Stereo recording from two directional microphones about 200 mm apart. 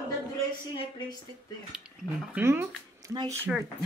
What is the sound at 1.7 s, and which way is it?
Speech, 5° right (ahead or behind).